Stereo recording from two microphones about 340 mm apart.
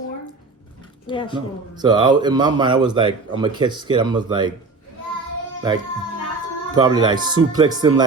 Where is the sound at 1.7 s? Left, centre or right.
Centre.